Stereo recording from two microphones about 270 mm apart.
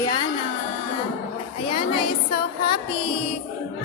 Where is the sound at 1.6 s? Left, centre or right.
Centre.